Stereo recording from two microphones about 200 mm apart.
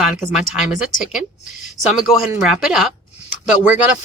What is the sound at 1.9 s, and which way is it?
Speech, centre (ahead or behind).